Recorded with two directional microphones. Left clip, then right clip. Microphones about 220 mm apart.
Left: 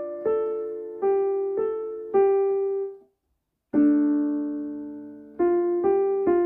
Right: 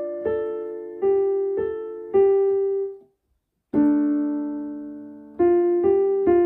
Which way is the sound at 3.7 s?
45° right (ahead or behind).